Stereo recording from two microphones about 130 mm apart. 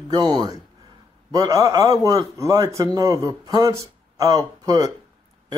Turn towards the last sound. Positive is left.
turn(degrees=-30)  # may be behind; listen again after turning